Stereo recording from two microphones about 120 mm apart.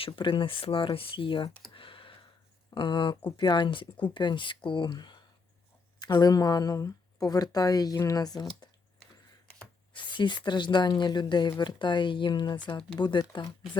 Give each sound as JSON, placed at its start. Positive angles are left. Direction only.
{"t": 0.0, "sound": "speech", "side_deg": 45}
{"t": 1.7, "sound": "a sound", "side_deg": 45}
{"t": 2.6, "sound": "a woman's voice", "side_deg": 40}
{"t": 9.9, "sound": "a woman's voice", "side_deg": 40}